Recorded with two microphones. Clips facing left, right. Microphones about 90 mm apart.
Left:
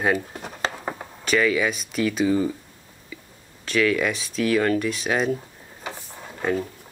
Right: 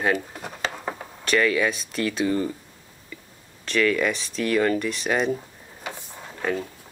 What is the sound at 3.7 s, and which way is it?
Speech, 5° left (ahead or behind).